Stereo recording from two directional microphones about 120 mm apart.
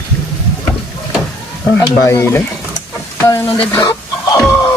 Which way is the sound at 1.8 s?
25° left (ahead or behind).